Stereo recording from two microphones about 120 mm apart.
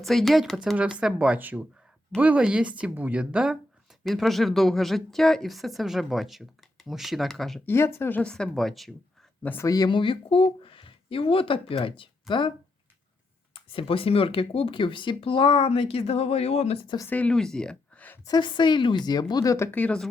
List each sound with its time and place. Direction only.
0.0 s speech: centre (ahead or behind)
7.6 s speech: 20° left (ahead or behind)
8.2 s speech: 5° left (ahead or behind)
9.4 s speech: 15° left (ahead or behind)
9.6 s speech: 30° left (ahead or behind)
9.9 s speech: 45° left (ahead or behind)
17.1 s speech: 10° left (ahead or behind)
18.3 s speech: 40° left (ahead or behind); by 20.1 s 10° left (ahead or behind)